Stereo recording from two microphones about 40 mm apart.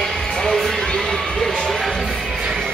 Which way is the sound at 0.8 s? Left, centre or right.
Centre.